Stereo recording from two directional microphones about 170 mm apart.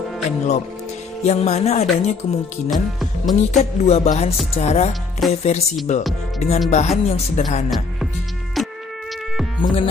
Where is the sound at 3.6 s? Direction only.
45° left (ahead or behind).